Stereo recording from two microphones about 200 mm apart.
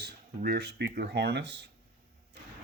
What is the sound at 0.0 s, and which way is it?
Speech, 55° right (ahead or behind).